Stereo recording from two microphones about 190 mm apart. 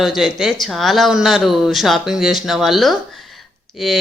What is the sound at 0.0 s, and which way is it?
Speech, centre (ahead or behind).